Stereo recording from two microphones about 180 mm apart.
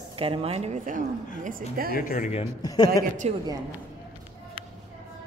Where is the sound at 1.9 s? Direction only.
50° left (ahead or behind).